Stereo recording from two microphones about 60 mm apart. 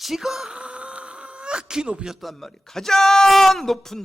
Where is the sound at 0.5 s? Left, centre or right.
Centre.